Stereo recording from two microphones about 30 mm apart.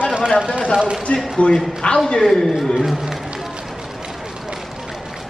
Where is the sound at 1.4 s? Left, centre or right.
Left.